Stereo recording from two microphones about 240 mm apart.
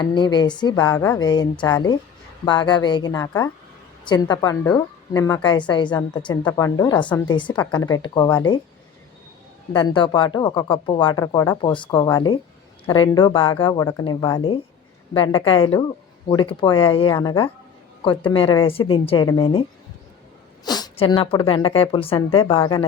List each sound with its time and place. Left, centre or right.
0.0 s speech: centre
9.7 s speech: centre
20.7 s speech: centre